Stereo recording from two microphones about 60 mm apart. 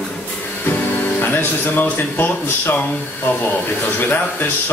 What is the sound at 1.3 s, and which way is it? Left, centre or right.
Speech, left.